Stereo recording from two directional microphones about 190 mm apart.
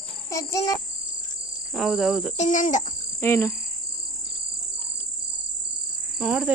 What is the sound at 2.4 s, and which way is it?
Speech, 40° left (ahead or behind).